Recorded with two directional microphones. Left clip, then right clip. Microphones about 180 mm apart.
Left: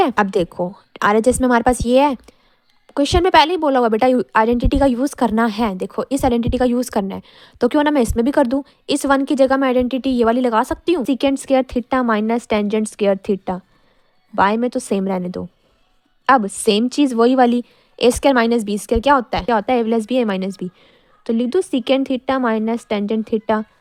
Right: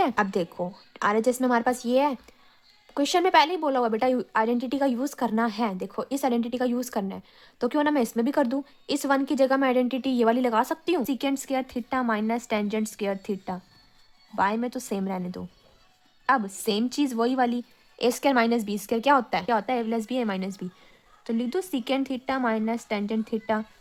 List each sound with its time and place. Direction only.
0.0 s a woman's voice: 40° left (ahead or behind)
11.0 s a woman's voice: 45° left (ahead or behind)